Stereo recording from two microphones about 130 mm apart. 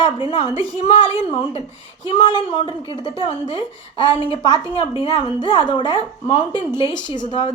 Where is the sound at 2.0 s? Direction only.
40° left (ahead or behind).